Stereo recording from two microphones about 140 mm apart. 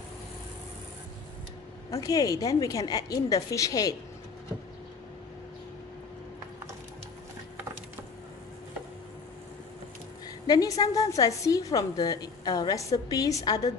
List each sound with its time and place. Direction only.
1.9 s a woman's voice: 25° left (ahead or behind)
10.4 s a woman's voice: 25° left (ahead or behind)